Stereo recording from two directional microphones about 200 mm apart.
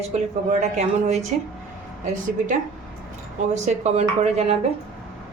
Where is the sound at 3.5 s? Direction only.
35° right (ahead or behind).